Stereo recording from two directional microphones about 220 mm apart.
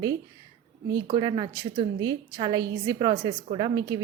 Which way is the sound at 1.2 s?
20° right (ahead or behind).